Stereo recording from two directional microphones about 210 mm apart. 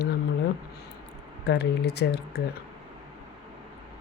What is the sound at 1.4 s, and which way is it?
Speech, 55° left (ahead or behind).